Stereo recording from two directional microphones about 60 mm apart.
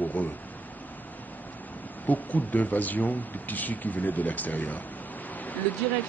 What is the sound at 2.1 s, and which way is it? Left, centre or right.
Speech, left.